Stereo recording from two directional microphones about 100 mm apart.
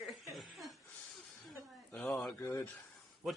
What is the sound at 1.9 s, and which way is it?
Speech, 10° left (ahead or behind).